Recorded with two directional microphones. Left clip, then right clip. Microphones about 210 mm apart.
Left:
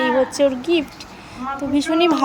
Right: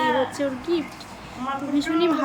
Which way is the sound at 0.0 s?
30° left (ahead or behind).